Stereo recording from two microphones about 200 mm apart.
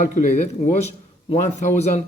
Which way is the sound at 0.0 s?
35° left (ahead or behind).